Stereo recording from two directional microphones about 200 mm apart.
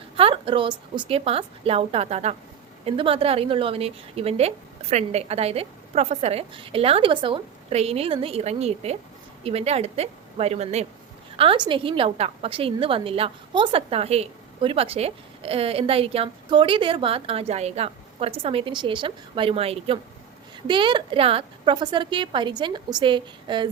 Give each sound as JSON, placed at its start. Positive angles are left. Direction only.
{"t": 0.2, "sound": "a woman's voice", "side_deg": -25}